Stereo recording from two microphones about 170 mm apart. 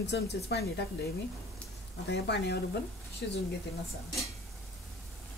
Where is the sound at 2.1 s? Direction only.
85° left.